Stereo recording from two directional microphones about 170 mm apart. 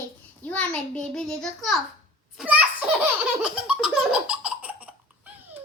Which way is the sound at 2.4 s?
5° right (ahead or behind).